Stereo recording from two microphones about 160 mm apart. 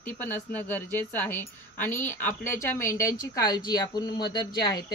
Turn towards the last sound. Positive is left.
turn(degrees=25)  # may be behind; listen again after turning